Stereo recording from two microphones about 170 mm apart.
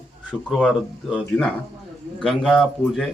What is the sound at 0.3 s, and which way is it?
Speech, 5° left (ahead or behind).